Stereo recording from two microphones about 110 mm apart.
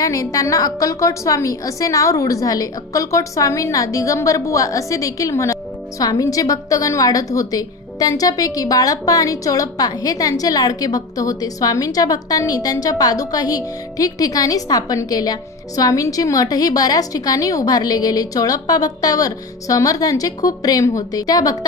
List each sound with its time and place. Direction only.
0.0 s a woman's voice: 30° left (ahead or behind)